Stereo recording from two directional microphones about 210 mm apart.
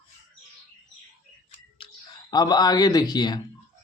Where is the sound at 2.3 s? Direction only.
20° left (ahead or behind).